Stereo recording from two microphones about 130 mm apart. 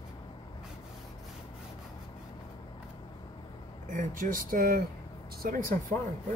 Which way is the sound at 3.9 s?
90° right.